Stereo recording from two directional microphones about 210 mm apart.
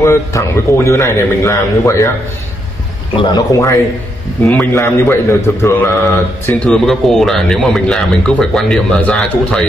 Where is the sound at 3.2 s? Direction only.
20° left (ahead or behind).